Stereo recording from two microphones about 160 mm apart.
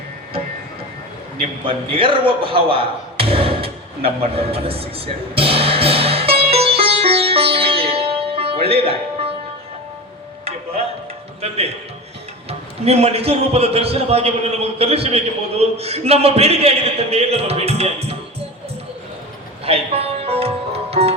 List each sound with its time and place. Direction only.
1.4 s a sound: 35° right (ahead or behind)
7.9 s music: 35° right (ahead or behind)
12.5 s a man's voice: 40° right (ahead or behind)
19.6 s music: 40° right (ahead or behind)